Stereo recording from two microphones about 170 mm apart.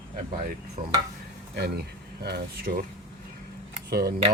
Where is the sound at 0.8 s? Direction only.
55° right (ahead or behind).